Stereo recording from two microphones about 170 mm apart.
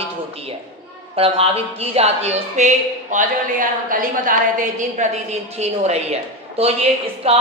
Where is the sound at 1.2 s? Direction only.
35° right (ahead or behind).